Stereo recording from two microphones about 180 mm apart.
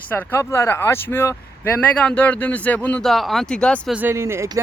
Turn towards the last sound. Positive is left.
turn(degrees=-15)  # may be behind; listen again after turning